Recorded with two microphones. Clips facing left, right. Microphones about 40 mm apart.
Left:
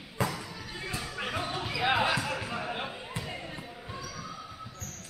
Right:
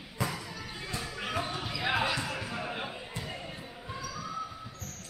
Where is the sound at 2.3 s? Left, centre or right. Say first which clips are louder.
Left 2 dB; centre.